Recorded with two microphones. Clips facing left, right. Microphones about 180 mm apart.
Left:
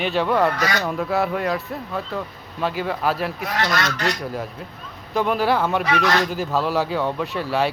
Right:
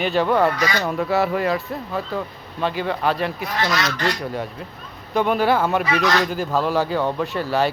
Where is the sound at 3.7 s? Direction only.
55° left (ahead or behind).